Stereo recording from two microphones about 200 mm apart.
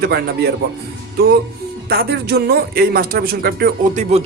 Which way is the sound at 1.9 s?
55° right (ahead or behind).